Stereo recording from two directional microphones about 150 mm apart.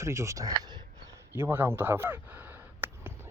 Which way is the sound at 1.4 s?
15° right (ahead or behind).